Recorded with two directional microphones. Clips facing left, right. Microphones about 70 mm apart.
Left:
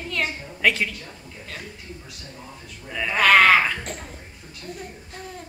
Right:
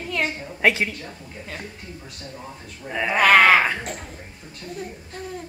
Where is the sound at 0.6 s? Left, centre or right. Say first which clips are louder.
Right 2 dB; right.